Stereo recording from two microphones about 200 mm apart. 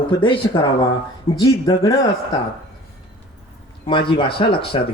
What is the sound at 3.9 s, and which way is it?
Speech, 25° left (ahead or behind).